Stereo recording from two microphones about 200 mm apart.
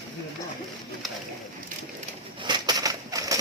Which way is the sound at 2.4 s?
20° right (ahead or behind).